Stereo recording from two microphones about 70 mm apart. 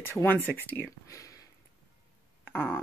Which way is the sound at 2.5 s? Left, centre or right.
Left.